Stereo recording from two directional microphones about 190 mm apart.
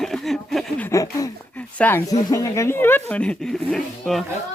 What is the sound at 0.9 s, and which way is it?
Speech, 15° left (ahead or behind).